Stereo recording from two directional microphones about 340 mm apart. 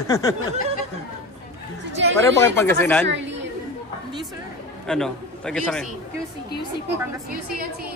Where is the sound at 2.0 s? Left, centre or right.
Right.